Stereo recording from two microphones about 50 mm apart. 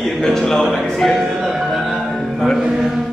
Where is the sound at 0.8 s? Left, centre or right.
Centre.